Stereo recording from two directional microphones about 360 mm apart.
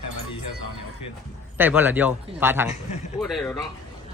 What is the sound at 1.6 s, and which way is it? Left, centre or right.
A man's voice, centre.